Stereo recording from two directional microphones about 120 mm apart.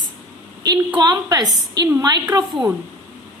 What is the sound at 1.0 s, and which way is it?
A woman's voice, 35° right (ahead or behind).